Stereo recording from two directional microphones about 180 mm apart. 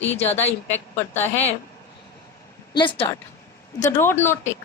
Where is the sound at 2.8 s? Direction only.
25° left (ahead or behind).